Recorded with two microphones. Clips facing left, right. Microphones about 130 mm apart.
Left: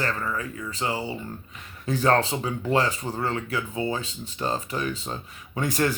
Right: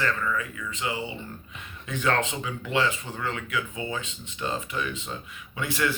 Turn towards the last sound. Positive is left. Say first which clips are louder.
# left 3 dB
turn(degrees=40)  # may be behind; listen again after turning